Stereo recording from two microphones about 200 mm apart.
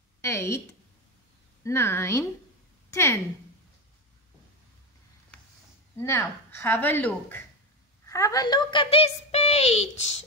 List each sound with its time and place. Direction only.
0.2 s a woman's voice: 15° left (ahead or behind)
1.6 s a woman's voice: 10° left (ahead or behind)
5.9 s a woman's voice: 15° left (ahead or behind); by 10.1 s 35° left (ahead or behind)